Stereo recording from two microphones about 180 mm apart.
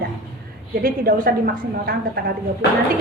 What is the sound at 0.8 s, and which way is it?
A woman's voice, 55° right (ahead or behind).